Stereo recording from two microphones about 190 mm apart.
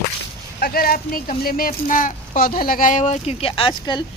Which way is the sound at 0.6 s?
50° left (ahead or behind).